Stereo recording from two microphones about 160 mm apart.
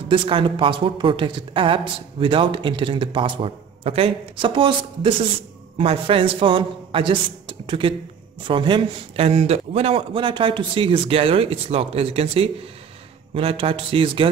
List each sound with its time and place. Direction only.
0.1 s speech: 35° right (ahead or behind)